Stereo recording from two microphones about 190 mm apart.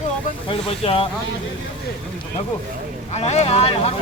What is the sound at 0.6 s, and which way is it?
Speech, 30° left (ahead or behind).